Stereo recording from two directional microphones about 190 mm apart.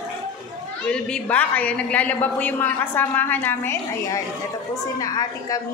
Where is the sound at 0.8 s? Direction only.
5° left (ahead or behind).